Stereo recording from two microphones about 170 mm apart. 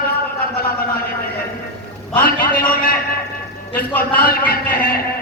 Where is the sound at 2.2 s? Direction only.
60° left (ahead or behind).